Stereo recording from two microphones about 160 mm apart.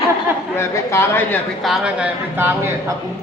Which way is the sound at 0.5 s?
15° left (ahead or behind).